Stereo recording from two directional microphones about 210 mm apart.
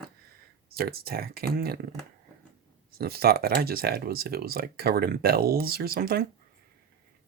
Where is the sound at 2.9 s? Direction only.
45° right (ahead or behind).